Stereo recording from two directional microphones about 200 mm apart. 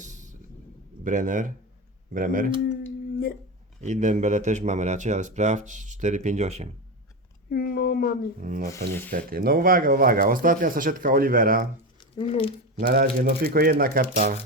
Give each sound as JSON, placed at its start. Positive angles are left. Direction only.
{"t": 0.0, "sound": "a sound", "side_deg": -40}
{"t": 1.0, "sound": "speech", "side_deg": -40}
{"t": 3.8, "sound": "speech", "side_deg": -35}
{"t": 7.5, "sound": "speech", "side_deg": 50}
{"t": 8.4, "sound": "speech", "side_deg": -45}
{"t": 12.1, "sound": "speech", "side_deg": 30}
{"t": 12.9, "sound": "speech", "side_deg": -45}